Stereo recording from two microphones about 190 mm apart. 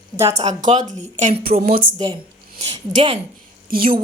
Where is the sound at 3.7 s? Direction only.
50° right (ahead or behind).